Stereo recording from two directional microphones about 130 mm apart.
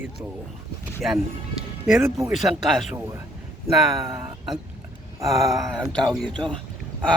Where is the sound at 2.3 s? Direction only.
Centre (ahead or behind).